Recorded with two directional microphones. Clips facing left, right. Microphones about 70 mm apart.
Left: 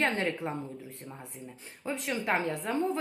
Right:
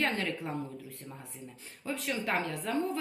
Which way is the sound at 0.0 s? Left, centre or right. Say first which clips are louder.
Left 3 dB; left.